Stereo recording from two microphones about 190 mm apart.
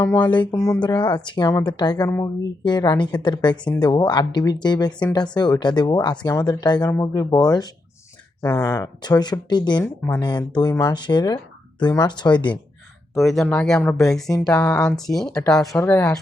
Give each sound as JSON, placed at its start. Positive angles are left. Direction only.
{"t": 0.0, "sound": "speech", "side_deg": 20}
{"t": 13.1, "sound": "speech", "side_deg": 0}